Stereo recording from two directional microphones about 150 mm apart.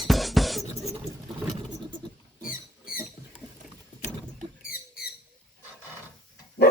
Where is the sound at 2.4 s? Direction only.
70° left (ahead or behind).